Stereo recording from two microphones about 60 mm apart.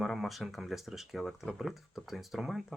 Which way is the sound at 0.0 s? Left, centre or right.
Centre.